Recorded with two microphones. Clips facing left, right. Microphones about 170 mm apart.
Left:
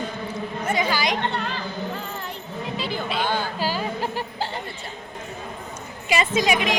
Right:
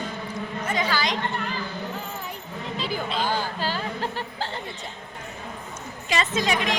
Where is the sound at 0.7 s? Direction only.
10° left (ahead or behind).